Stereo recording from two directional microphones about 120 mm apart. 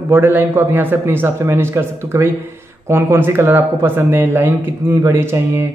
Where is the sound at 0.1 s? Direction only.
20° right (ahead or behind).